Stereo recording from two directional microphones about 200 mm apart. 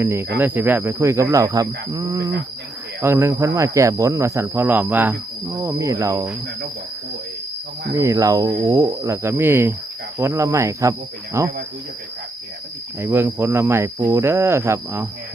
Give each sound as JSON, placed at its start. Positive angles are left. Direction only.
{"t": 0.0, "sound": "speech", "side_deg": -15}
{"t": 7.9, "sound": "speech", "side_deg": -15}
{"t": 13.0, "sound": "speech", "side_deg": -10}